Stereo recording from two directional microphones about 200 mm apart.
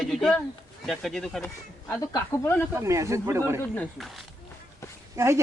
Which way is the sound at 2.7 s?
15° right (ahead or behind).